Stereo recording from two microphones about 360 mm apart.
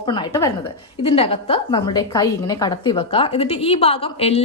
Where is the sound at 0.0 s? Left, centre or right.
Centre.